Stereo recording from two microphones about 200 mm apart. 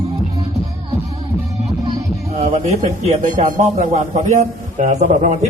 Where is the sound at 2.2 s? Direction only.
35° right (ahead or behind).